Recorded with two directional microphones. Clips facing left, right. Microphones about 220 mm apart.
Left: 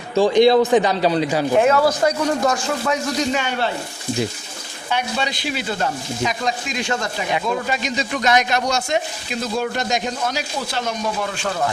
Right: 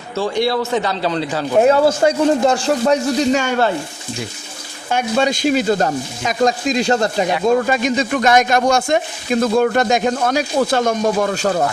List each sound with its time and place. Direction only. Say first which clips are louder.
0.2 s a man's voice: left 5 dB; 20° left (ahead or behind)
1.6 s a man's voice: right 4 dB; 30° right (ahead or behind)
4.9 s speech: right 7 dB; 45° right (ahead or behind)
7.4 s speech: right 8 dB; 50° right (ahead or behind)